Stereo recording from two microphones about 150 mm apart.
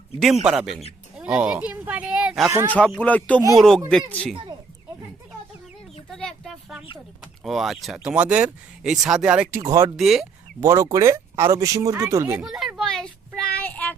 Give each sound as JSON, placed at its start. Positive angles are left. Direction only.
{"t": 0.2, "sound": "speech", "side_deg": -5}
{"t": 3.0, "sound": "speech", "side_deg": 10}
{"t": 6.1, "sound": "a sound", "side_deg": 5}
{"t": 7.2, "sound": "speech", "side_deg": 0}
{"t": 10.0, "sound": "speech", "side_deg": 0}
{"t": 10.6, "sound": "speech", "side_deg": -20}
{"t": 12.4, "sound": "child singing", "side_deg": 0}